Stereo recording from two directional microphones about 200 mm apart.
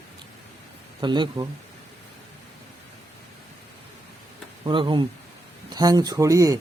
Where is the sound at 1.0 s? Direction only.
20° right (ahead or behind).